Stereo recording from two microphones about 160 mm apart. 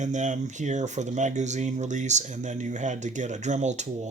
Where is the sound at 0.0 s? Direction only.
50° right (ahead or behind).